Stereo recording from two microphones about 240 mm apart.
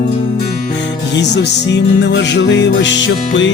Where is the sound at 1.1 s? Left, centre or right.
Left.